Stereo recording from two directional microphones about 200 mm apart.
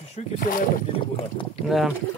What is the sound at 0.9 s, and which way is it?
Boat, 25° left (ahead or behind).